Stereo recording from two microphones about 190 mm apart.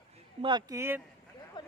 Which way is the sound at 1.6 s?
25° left (ahead or behind).